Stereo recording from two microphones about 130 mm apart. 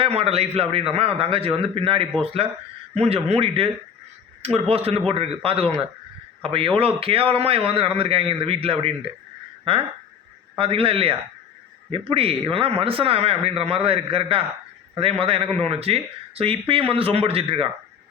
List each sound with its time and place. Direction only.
0.0 s speech: 50° right (ahead or behind)
4.7 s speech: 50° right (ahead or behind)
10.6 s speech: 45° right (ahead or behind)